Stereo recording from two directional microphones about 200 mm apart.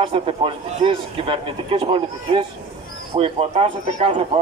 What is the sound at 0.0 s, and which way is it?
A man's voice, 25° right (ahead or behind).